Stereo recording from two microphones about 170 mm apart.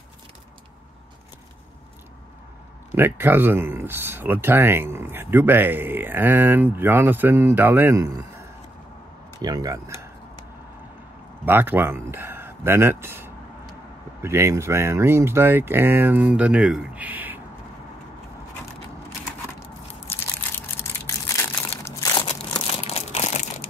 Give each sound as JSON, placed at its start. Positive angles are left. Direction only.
{"t": 2.9, "sound": "speech", "side_deg": -10}
{"t": 9.4, "sound": "speech", "side_deg": -20}
{"t": 11.4, "sound": "speech", "side_deg": -10}
{"t": 20.5, "sound": "crushing", "side_deg": 15}
{"t": 22.1, "sound": "crumpling", "side_deg": 30}